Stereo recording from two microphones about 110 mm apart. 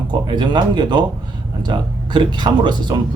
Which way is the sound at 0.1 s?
45° right (ahead or behind).